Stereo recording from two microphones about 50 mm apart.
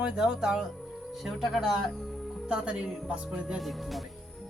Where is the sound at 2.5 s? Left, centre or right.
Right.